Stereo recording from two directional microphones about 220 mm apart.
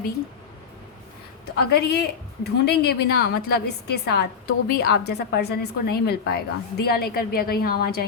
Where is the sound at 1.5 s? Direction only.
45° left (ahead or behind).